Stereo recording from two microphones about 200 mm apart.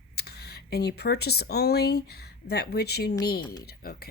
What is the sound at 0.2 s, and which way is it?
Speech, 55° left (ahead or behind).